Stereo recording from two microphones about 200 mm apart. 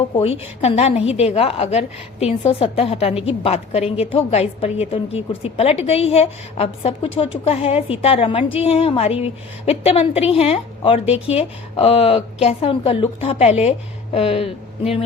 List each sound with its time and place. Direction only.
0.2 s a woman's voice: 30° left (ahead or behind)